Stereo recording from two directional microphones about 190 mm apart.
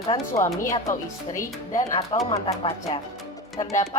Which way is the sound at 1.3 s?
40° left (ahead or behind).